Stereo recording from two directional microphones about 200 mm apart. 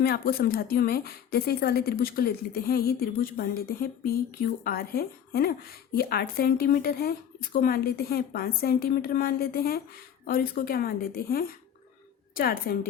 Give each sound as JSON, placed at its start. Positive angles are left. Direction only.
{"t": 0.0, "sound": "a woman's voice", "side_deg": 50}